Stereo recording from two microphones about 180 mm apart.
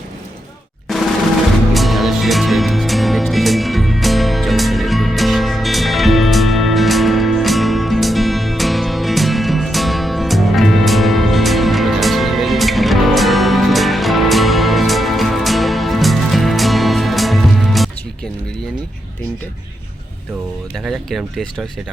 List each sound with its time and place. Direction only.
1.7 s music: centre (ahead or behind)
20.7 s music: centre (ahead or behind)